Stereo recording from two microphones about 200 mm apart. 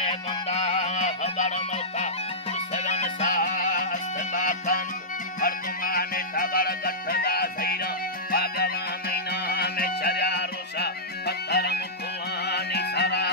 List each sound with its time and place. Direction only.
0.0 s music: 30° left (ahead or behind)
2.7 s music: 35° left (ahead or behind); by 13.3 s 55° left (ahead or behind)